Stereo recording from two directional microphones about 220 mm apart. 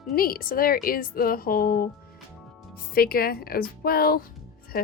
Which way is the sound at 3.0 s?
45° left (ahead or behind).